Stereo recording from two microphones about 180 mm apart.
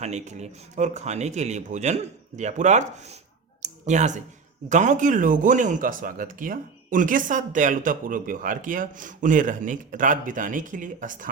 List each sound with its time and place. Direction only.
0.0 s speech: 40° right (ahead or behind)
3.6 s clicking: 40° right (ahead or behind)
4.7 s speech: 45° right (ahead or behind)